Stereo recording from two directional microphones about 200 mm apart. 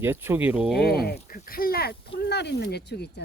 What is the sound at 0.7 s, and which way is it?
Speech, 50° left (ahead or behind).